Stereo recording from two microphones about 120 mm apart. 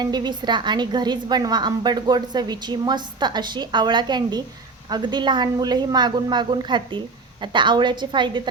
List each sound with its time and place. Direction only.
0.0 s a woman's voice: 35° right (ahead or behind)